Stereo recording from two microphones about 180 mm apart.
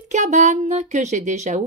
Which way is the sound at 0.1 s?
40° right (ahead or behind).